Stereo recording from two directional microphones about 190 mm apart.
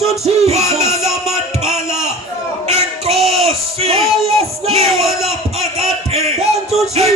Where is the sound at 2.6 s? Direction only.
35° right (ahead or behind).